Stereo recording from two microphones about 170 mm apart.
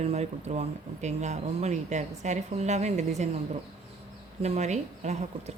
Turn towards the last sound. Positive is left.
turn(degrees=-40)  # may be behind; listen again after turning